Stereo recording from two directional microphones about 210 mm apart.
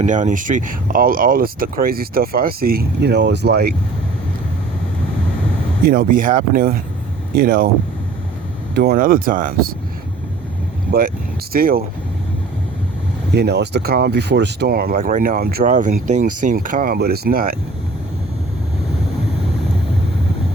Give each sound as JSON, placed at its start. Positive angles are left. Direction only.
{"t": 0.0, "sound": "speech", "side_deg": -35}
{"t": 5.8, "sound": "speech", "side_deg": -45}
{"t": 8.7, "sound": "speech", "side_deg": -50}
{"t": 10.9, "sound": "speech", "side_deg": -45}
{"t": 13.3, "sound": "speech", "side_deg": -50}